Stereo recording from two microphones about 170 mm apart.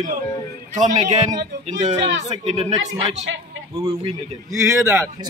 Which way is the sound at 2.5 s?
40° right (ahead or behind).